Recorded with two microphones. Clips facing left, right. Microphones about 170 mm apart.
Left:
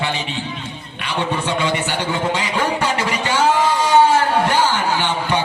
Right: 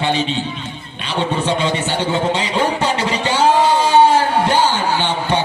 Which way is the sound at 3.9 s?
20° right (ahead or behind).